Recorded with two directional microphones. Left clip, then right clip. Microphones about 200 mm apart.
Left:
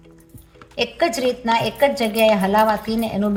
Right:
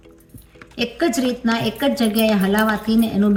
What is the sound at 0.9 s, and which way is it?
A woman's voice, 30° left (ahead or behind).